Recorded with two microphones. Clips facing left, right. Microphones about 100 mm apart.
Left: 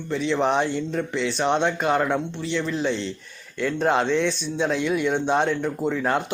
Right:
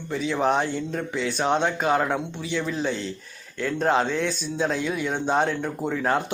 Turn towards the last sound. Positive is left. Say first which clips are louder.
# left 1 dB
turn(degrees=0)  # may be behind; listen again after turning